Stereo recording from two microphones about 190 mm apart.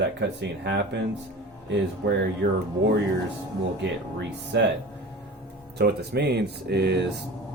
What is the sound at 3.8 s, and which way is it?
Speech, 65° right (ahead or behind).